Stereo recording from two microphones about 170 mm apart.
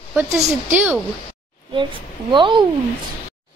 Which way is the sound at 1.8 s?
30° right (ahead or behind).